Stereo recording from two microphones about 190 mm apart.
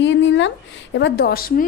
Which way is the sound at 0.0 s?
70° left (ahead or behind).